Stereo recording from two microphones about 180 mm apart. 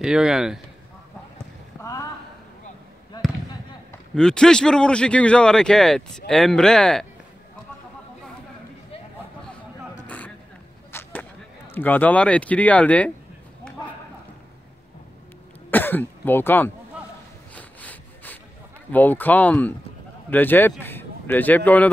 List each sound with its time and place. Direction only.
0.0 s a man's voice: 5° right (ahead or behind)
1.8 s a sound: 20° left (ahead or behind)
4.1 s a man's voice: 5° left (ahead or behind)
10.0 s vehicle: 10° left (ahead or behind)
10.9 s a sound: 15° left (ahead or behind)
15.7 s speech: 10° left (ahead or behind)
17.6 s sawing: 10° left (ahead or behind)
18.9 s speech: 10° left (ahead or behind)